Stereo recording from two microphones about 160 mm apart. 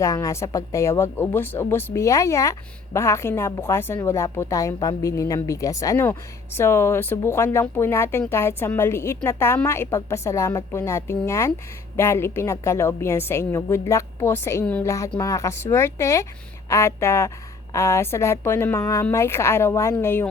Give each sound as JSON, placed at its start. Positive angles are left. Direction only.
{"t": 0.0, "sound": "speech", "side_deg": 20}